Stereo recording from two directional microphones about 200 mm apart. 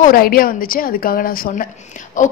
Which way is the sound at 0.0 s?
45° left (ahead or behind).